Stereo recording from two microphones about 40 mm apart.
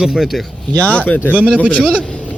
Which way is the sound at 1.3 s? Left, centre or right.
Right.